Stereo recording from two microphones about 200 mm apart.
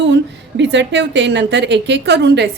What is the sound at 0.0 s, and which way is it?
A woman's voice, 60° right (ahead or behind).